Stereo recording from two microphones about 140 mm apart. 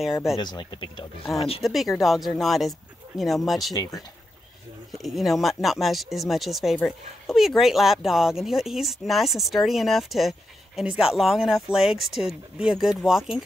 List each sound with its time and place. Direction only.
0.0 s speech: centre (ahead or behind)
0.4 s speech: 30° left (ahead or behind)
1.3 s speech: centre (ahead or behind)
3.7 s speech: 25° left (ahead or behind)
4.9 s speech: centre (ahead or behind)